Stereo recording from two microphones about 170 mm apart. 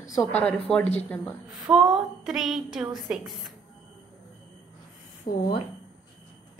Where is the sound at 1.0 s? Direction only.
10° left (ahead or behind).